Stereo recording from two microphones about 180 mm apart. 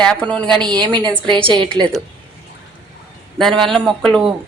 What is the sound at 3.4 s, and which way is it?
Speech, centre (ahead or behind).